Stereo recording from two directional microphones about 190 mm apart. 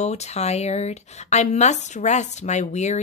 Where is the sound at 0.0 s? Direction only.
35° left (ahead or behind).